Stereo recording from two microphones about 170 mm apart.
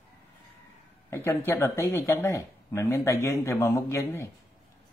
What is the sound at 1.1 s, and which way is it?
Speech, 15° left (ahead or behind).